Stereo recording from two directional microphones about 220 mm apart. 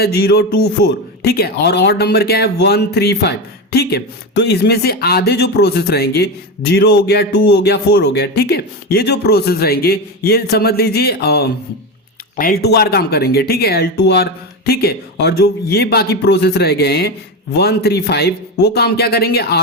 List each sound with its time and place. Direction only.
0.0 s speech: 50° left (ahead or behind)